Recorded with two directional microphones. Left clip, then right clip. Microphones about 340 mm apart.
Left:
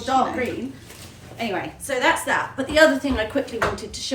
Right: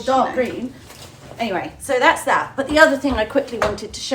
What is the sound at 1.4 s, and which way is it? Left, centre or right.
A woman's voice, centre.